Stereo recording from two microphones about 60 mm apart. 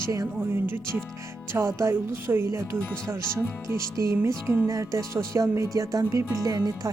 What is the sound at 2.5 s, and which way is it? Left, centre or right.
Music, right.